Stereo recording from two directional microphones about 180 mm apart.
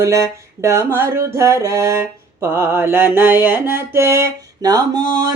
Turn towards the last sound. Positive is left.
turn(degrees=-25)  # may be behind; listen again after turning